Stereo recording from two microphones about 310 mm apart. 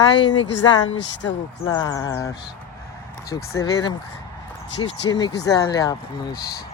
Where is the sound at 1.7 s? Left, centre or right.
Centre.